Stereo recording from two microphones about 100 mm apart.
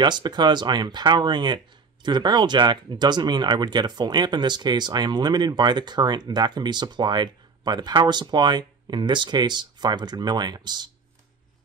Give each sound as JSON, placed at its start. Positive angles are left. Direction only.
{"t": 0.0, "sound": "speech", "side_deg": -45}